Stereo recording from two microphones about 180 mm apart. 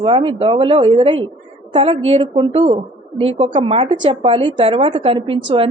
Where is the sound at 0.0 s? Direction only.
30° right (ahead or behind).